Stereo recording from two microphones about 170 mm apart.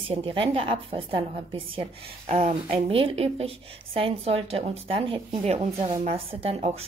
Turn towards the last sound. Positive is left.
turn(degrees=-35)  # may be behind; listen again after turning